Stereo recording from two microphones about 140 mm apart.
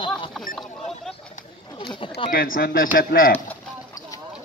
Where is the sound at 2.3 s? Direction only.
90° left.